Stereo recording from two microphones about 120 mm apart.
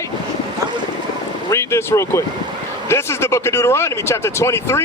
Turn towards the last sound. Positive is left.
turn(degrees=20)  # may be behind; listen again after turning